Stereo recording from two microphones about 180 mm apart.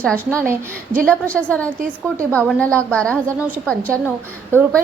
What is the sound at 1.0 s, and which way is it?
A woman's voice, 5° left (ahead or behind).